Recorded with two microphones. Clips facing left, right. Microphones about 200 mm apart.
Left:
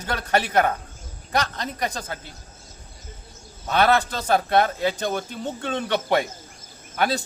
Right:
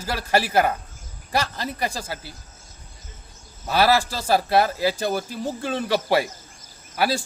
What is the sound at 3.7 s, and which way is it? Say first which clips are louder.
A man's voice: even; 5° right (ahead or behind).